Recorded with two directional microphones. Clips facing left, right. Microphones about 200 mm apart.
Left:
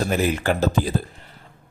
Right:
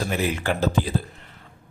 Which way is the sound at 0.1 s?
45° left (ahead or behind).